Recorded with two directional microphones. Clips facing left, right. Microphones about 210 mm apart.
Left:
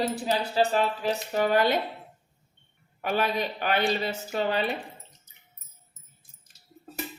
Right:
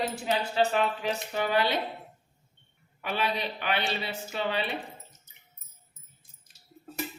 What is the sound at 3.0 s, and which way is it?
A woman's voice, 45° left (ahead or behind).